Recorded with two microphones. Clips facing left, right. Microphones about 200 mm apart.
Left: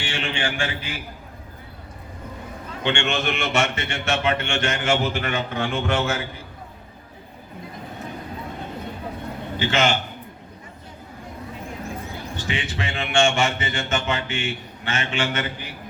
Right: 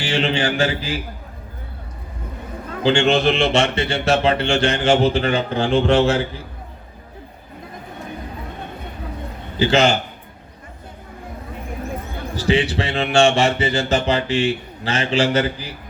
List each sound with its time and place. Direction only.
0.0 s a man's voice: 35° right (ahead or behind)
2.8 s a man's voice: 35° right (ahead or behind)
9.6 s a man's voice: 35° right (ahead or behind)
12.4 s a man's voice: 35° right (ahead or behind)